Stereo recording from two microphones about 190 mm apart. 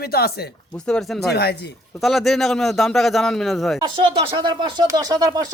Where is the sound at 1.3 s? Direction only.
60° left (ahead or behind).